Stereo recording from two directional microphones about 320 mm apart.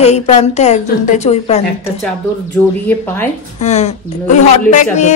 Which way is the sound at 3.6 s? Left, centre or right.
Left.